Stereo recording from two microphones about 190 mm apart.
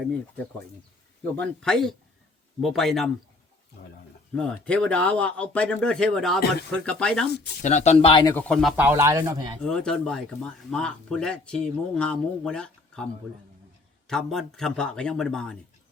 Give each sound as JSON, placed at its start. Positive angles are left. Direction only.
{"t": 1.4, "sound": "speech", "side_deg": 5}
{"t": 4.4, "sound": "speech", "side_deg": 5}
{"t": 7.6, "sound": "speech", "side_deg": 35}
{"t": 8.3, "sound": "speech", "side_deg": 5}
{"t": 8.7, "sound": "speech", "side_deg": -10}
{"t": 9.6, "sound": "speech", "side_deg": 5}
{"t": 14.1, "sound": "speech", "side_deg": 0}